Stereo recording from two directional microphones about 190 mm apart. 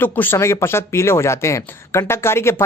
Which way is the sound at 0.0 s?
10° left (ahead or behind).